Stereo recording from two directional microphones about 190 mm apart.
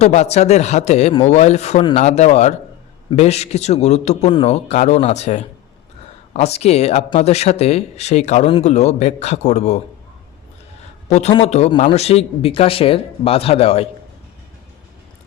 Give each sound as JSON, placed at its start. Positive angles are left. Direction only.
{"t": 0.0, "sound": "speech", "side_deg": 35}
{"t": 11.1, "sound": "speech", "side_deg": 35}